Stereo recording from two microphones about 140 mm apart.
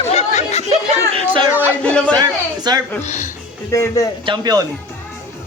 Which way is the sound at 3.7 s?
20° left (ahead or behind).